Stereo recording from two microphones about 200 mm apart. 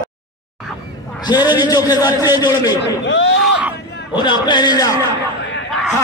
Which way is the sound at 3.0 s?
65° left (ahead or behind).